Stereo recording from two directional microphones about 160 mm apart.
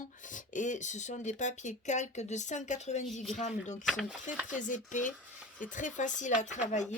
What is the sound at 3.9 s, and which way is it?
Speech, centre (ahead or behind).